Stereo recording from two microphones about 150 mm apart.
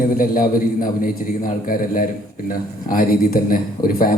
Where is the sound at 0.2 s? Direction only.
65° left (ahead or behind).